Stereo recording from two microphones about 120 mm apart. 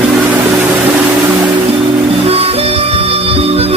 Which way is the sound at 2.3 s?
55° right (ahead or behind).